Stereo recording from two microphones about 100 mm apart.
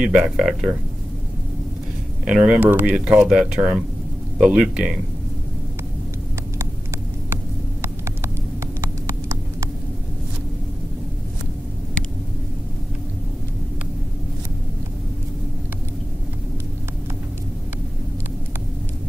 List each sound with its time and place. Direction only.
0.0 s speech: 10° right (ahead or behind)
2.2 s speech: 5° right (ahead or behind)
7.8 s a sound: 25° right (ahead or behind)